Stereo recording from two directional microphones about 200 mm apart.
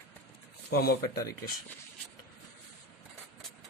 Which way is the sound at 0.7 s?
50° left (ahead or behind).